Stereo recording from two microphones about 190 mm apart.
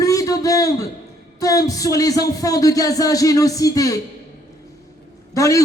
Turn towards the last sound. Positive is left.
turn(degrees=15)  # may be behind; listen again after turning